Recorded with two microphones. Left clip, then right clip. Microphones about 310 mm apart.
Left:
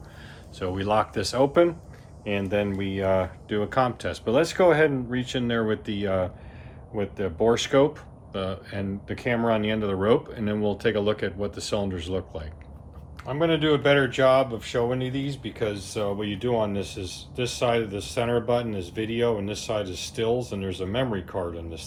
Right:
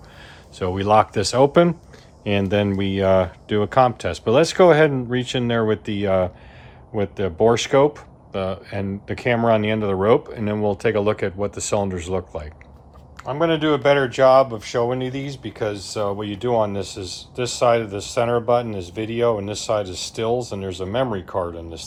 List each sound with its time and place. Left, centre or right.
0.6 s speech: right